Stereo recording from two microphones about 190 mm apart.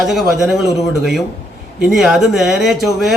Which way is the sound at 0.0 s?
Centre (ahead or behind).